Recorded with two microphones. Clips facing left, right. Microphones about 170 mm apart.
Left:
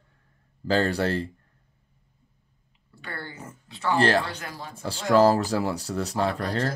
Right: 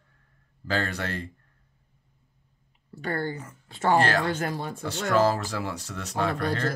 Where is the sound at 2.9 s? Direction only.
45° right (ahead or behind).